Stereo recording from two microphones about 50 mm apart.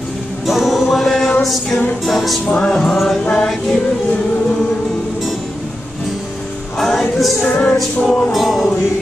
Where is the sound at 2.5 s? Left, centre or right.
Centre.